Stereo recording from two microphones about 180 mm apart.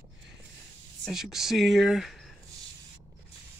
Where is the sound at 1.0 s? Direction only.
Centre (ahead or behind).